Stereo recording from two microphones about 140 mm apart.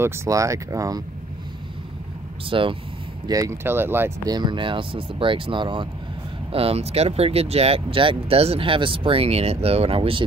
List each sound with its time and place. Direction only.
0.0 s speech: 20° right (ahead or behind)
2.5 s speech: 40° right (ahead or behind)
3.3 s speech: 25° right (ahead or behind)
4.3 s speech: 35° right (ahead or behind)